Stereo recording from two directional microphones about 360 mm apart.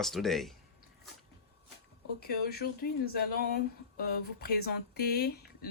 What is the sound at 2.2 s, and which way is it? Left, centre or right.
Speech, left.